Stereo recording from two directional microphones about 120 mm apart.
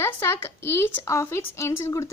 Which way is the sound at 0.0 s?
20° left (ahead or behind).